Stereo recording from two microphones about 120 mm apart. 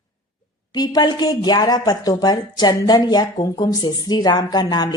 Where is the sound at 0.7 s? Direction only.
35° left (ahead or behind).